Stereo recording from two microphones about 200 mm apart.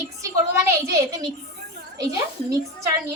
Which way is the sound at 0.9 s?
20° right (ahead or behind).